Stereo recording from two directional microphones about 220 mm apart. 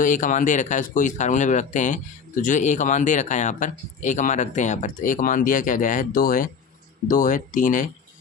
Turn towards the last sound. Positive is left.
turn(degrees=35)  # may be behind; listen again after turning